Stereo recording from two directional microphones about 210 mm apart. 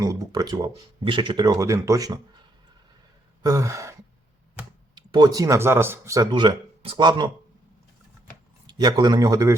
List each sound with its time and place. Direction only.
0.0 s speech: 15° right (ahead or behind)
3.4 s speech: 15° right (ahead or behind)
4.9 s speech: 20° right (ahead or behind)
8.6 s speech: 20° right (ahead or behind)